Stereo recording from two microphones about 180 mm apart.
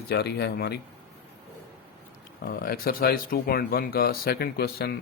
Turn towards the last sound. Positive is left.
turn(degrees=60)  # may be behind; listen again after turning